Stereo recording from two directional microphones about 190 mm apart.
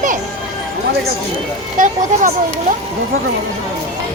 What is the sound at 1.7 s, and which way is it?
Speech, 45° right (ahead or behind).